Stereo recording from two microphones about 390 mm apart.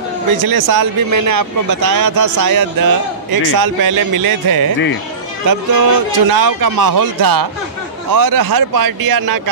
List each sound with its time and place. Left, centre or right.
0.4 s speech: right